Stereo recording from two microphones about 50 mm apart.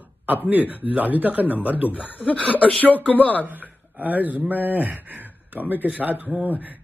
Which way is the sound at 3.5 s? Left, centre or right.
Right.